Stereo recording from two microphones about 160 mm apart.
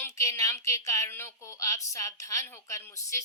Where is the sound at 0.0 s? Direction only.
20° left (ahead or behind).